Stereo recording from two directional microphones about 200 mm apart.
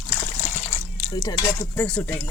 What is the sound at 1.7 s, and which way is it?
Speech, 10° left (ahead or behind).